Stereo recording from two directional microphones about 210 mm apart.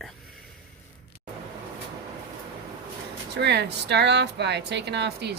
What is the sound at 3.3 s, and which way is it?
Speech, 55° right (ahead or behind).